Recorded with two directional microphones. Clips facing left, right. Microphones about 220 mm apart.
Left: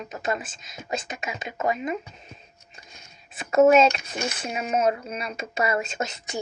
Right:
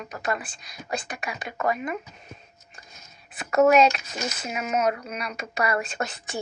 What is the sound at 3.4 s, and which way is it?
Speech, 25° left (ahead or behind).